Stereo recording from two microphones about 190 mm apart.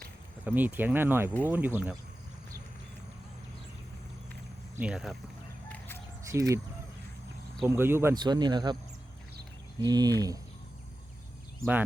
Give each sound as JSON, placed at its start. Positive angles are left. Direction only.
{"t": 0.4, "sound": "speech", "side_deg": -10}
{"t": 4.8, "sound": "speech", "side_deg": -5}
{"t": 6.3, "sound": "speech", "side_deg": -15}
{"t": 7.6, "sound": "speech", "side_deg": -15}
{"t": 9.8, "sound": "speech", "side_deg": -20}